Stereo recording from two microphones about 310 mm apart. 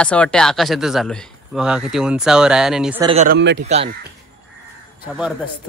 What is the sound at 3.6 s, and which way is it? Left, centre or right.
Speech, centre.